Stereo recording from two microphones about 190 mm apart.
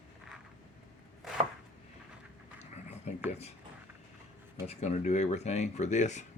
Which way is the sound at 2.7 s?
35° left (ahead or behind).